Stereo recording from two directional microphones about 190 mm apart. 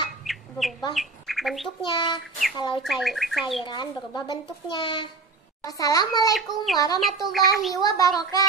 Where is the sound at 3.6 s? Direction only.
25° left (ahead or behind).